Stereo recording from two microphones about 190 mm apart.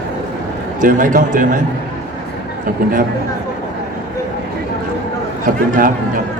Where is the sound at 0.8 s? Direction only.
45° right (ahead or behind).